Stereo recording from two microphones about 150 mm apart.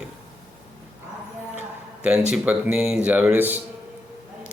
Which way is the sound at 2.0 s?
5° right (ahead or behind).